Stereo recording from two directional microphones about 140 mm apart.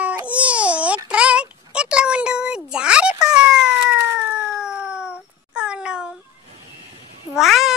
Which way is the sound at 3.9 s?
10° right (ahead or behind).